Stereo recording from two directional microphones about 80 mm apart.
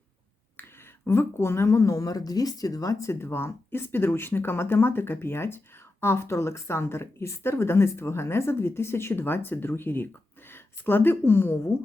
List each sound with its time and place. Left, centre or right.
1.0 s speech: left